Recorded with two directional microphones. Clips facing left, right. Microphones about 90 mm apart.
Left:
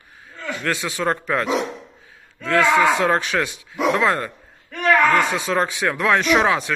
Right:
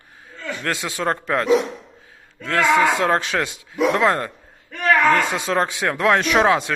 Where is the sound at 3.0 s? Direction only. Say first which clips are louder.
Even; 30° right (ahead or behind).